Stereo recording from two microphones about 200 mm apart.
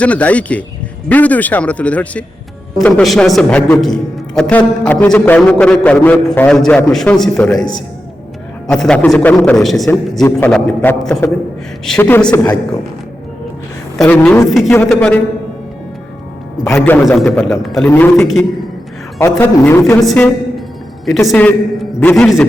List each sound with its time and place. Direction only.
0.0 s a man's voice: 5° left (ahead or behind)
14.0 s speech: 5° left (ahead or behind)
16.6 s a man's voice: 10° left (ahead or behind)